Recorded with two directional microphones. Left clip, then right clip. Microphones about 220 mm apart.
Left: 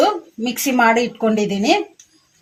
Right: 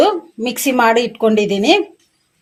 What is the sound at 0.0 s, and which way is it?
Speech, 30° right (ahead or behind).